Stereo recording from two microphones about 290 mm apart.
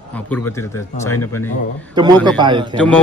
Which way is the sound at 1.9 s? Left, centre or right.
Centre.